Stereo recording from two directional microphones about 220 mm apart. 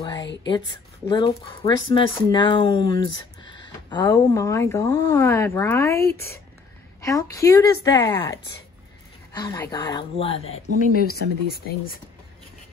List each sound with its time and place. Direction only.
0.0 s a sound: 20° left (ahead or behind)
1.0 s speech: 20° left (ahead or behind)
10.9 s speech: 45° left (ahead or behind)